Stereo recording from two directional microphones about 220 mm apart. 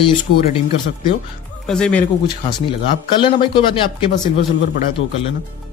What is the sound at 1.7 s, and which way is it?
Speech, 5° left (ahead or behind).